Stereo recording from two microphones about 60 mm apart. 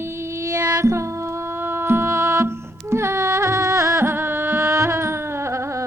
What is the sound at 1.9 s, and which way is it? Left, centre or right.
Music, right.